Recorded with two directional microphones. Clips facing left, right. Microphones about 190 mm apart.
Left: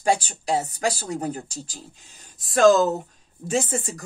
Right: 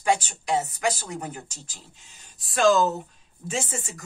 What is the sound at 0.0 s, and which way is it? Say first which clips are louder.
A woman's voice: left 2 dB; 35° left (ahead or behind).